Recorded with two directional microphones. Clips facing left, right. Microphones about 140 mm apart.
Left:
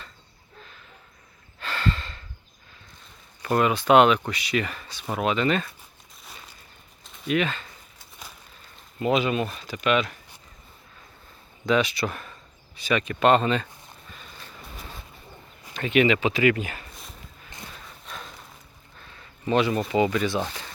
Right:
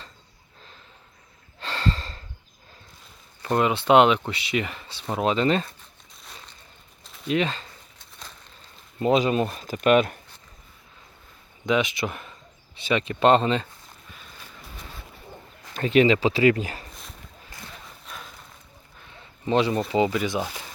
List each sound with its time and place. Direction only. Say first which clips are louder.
1.5 s sigh: even; 30° right (ahead or behind)
3.4 s speech: even; 20° right (ahead or behind)
6.2 s a sound: even; 5° left (ahead or behind)
7.3 s speech: even; 30° right (ahead or behind)
9.0 s speech: right 2 dB; 35° right (ahead or behind)
11.6 s speech: left 1 dB; 20° right (ahead or behind)
15.7 s speech: right 2 dB; 35° right (ahead or behind)
18.0 s a sound: left 3 dB; centre (ahead or behind)
19.0 s a sound: even; 20° right (ahead or behind)
20.1 s speech: left 1 dB; 15° right (ahead or behind)